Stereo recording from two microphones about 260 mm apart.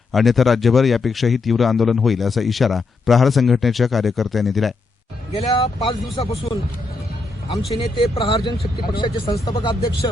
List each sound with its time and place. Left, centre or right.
0.1 s speech: centre
5.3 s speech: left
7.7 s speech: left